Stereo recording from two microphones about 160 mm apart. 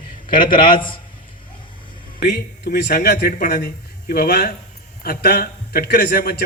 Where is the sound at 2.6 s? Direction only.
90° left.